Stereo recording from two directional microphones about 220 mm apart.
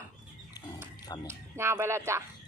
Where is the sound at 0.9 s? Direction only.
15° left (ahead or behind).